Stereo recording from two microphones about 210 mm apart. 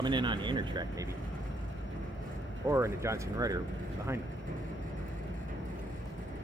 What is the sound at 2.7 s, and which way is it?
Speech, 15° right (ahead or behind).